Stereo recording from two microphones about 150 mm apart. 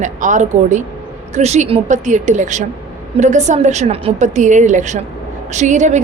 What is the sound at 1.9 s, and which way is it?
A woman's voice, 55° right (ahead or behind).